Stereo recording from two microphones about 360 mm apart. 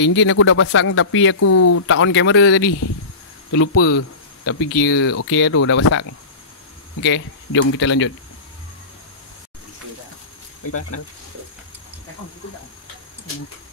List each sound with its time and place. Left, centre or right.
0.0 s speech: left
10.6 s speech: left